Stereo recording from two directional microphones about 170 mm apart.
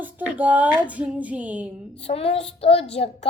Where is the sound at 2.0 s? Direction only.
35° left (ahead or behind).